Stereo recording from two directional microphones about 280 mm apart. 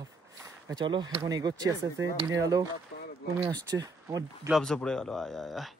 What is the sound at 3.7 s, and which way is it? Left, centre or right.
Speech, centre.